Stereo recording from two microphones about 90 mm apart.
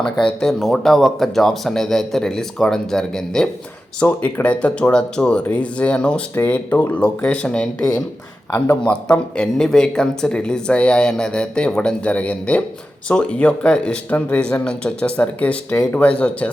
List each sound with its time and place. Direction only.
0.0 s speech: 10° left (ahead or behind)
4.0 s speech: 20° left (ahead or behind)